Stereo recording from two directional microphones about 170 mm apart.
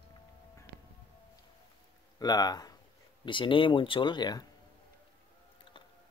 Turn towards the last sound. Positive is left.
turn(degrees=30)  # may be behind; listen again after turning